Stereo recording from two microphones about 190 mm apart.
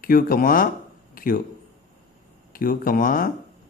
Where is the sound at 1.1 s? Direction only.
50° left (ahead or behind).